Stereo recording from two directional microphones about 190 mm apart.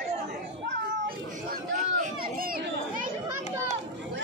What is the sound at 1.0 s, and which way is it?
Chatter, 45° right (ahead or behind).